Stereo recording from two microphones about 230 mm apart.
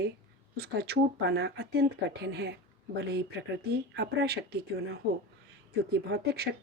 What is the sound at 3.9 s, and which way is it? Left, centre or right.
Speech, right.